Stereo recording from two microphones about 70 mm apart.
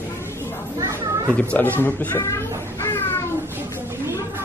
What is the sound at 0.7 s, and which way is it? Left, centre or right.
Children playing, right.